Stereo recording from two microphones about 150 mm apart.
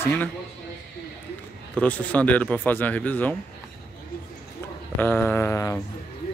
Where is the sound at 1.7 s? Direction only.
10° left (ahead or behind).